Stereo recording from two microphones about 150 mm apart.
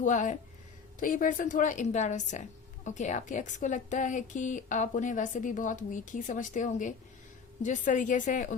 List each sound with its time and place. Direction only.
0.0 s a woman's voice: 55° left (ahead or behind)